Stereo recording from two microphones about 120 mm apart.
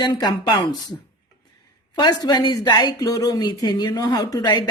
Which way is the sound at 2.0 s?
35° left (ahead or behind).